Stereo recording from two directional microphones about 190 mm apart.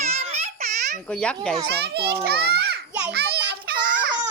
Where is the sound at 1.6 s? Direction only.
60° right (ahead or behind).